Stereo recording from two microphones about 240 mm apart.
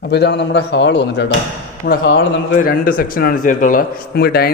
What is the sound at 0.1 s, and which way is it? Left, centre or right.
A man's voice, left.